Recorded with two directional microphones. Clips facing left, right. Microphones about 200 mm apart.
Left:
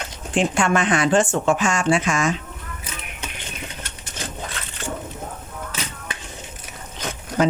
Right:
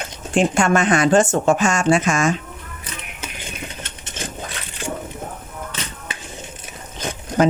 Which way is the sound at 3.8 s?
20° right (ahead or behind).